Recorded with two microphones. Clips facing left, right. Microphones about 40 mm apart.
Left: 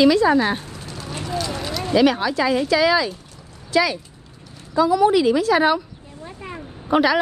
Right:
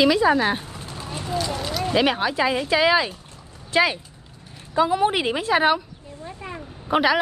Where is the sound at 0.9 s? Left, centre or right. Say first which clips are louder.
Left 2 dB; right.